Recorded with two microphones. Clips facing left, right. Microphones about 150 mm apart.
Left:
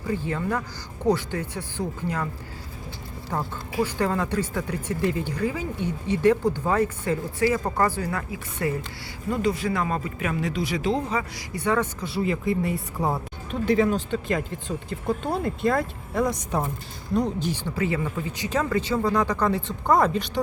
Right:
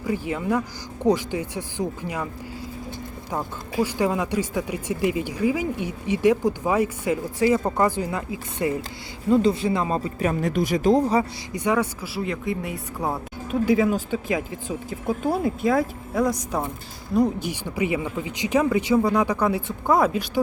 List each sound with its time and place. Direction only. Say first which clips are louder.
0.1 s speech: right 2 dB; 15° right (ahead or behind)
3.3 s speech: right 1 dB; 15° right (ahead or behind); by 11.3 s 40° right (ahead or behind)
11.5 s speech: right 2 dB; 15° right (ahead or behind)